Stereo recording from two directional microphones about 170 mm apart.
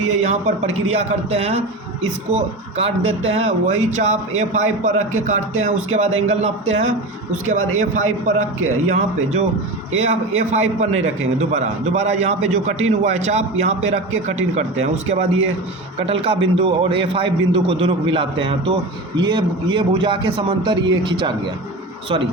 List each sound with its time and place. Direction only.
0.1 s a man's voice: 40° right (ahead or behind); by 21.5 s 25° right (ahead or behind)